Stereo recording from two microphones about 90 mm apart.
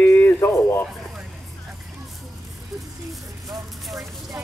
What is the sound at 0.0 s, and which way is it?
Radio, 25° left (ahead or behind).